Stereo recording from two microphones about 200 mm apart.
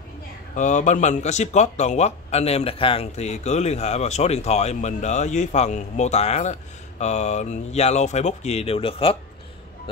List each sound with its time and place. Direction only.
0.6 s speech: 35° left (ahead or behind)